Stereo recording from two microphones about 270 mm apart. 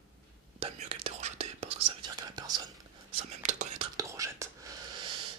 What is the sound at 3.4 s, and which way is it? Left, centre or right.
Whispering, right.